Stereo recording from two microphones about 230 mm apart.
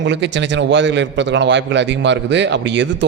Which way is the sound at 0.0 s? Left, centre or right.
Right.